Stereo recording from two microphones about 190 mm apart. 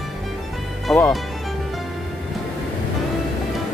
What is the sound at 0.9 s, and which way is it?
Speech, 5° left (ahead or behind).